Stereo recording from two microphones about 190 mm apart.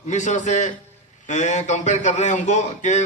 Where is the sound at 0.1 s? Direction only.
40° left (ahead or behind).